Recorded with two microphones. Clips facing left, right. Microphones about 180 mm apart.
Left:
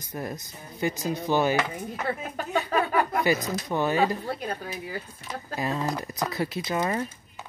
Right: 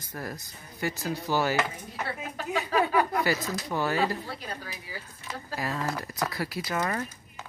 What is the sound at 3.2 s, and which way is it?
Speech, 20° left (ahead or behind).